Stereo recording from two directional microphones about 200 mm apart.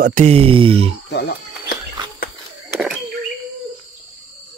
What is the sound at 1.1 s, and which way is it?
Music, 55° left (ahead or behind).